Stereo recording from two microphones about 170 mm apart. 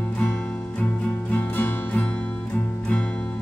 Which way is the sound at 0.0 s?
5° left (ahead or behind).